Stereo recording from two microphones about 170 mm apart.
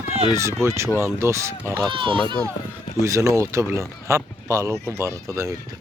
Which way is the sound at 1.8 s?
30° right (ahead or behind).